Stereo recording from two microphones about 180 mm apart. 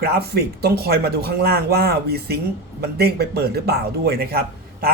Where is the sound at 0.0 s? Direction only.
60° right (ahead or behind).